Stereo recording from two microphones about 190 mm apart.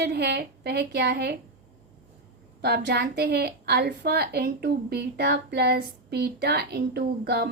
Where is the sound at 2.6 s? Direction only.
60° right (ahead or behind).